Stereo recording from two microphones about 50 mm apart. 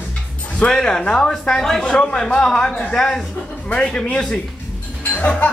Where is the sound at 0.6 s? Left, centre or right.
Centre.